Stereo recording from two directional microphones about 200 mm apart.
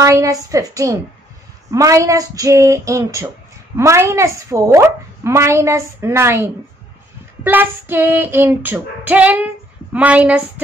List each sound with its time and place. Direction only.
0.0 s a woman's voice: 15° right (ahead or behind)